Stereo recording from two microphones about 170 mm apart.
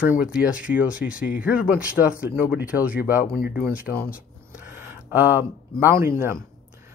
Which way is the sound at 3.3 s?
60° left (ahead or behind).